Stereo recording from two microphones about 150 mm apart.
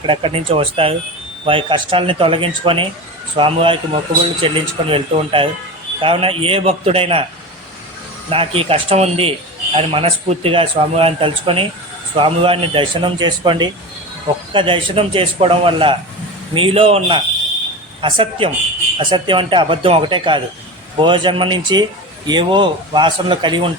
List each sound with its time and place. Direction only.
0.0 s speech: 35° right (ahead or behind)
8.3 s speech: 40° right (ahead or behind)